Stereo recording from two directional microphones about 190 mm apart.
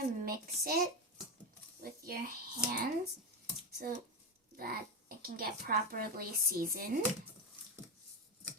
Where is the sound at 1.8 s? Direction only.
50° right (ahead or behind).